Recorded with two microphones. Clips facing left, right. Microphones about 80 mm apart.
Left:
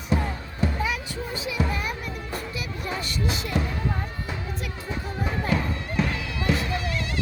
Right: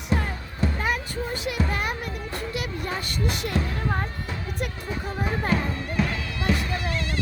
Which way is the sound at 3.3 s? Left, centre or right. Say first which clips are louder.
Right 1 dB; right.